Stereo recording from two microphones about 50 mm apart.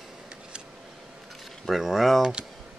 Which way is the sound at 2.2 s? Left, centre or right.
Centre.